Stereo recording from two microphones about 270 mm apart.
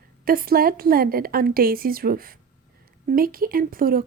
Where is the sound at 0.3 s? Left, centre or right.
Right.